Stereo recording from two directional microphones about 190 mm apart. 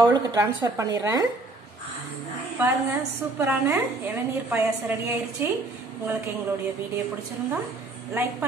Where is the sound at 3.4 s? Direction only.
10° right (ahead or behind).